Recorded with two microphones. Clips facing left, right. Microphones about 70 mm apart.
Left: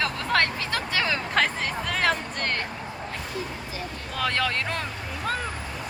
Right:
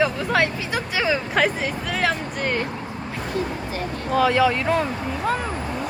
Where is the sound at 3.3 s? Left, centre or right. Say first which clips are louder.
Right 7 dB; right.